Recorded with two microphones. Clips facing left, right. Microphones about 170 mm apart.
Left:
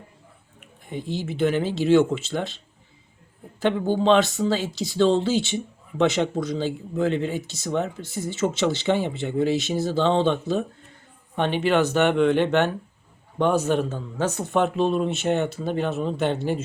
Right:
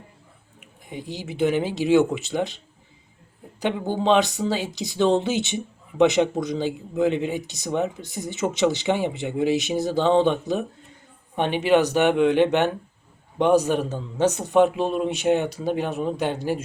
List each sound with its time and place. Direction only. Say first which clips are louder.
0.9 s speech: left 4 dB; 15° right (ahead or behind)
3.6 s speech: left 3 dB; 15° right (ahead or behind)